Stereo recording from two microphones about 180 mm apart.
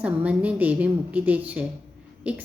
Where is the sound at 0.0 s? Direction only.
10° right (ahead or behind).